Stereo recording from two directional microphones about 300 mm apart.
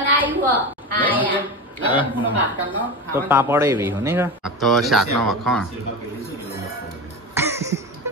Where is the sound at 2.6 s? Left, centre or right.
Centre.